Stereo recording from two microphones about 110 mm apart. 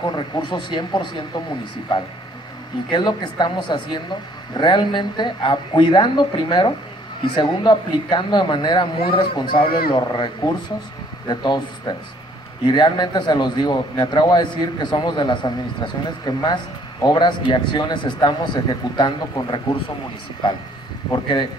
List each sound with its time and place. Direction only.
0.0 s a man's voice: 45° left (ahead or behind)
21.1 s a man's voice: 45° left (ahead or behind)